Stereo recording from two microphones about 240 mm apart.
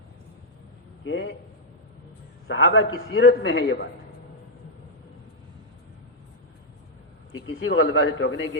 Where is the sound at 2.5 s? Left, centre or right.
Left.